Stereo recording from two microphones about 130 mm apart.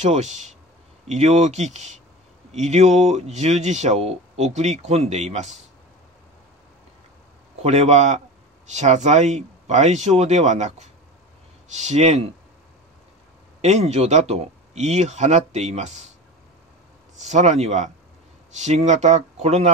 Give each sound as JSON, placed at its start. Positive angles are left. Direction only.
{"t": 0.0, "sound": "speech", "side_deg": -60}
{"t": 7.6, "sound": "speech", "side_deg": -60}
{"t": 11.7, "sound": "speech", "side_deg": -65}
{"t": 13.6, "sound": "speech", "side_deg": -60}
{"t": 17.2, "sound": "speech", "side_deg": -65}